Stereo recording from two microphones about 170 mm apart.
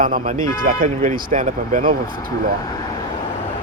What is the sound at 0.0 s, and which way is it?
A man's voice, 55° right (ahead or behind).